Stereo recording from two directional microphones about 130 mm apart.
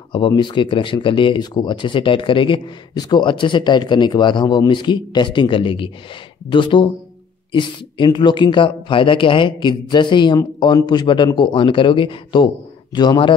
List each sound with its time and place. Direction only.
0.4 s speech: 35° left (ahead or behind)